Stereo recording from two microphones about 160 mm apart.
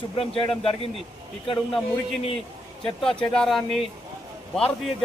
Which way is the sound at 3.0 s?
5° left (ahead or behind).